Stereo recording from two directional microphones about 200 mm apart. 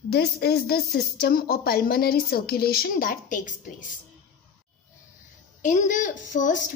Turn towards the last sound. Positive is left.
turn(degrees=40)  # may be behind; listen again after turning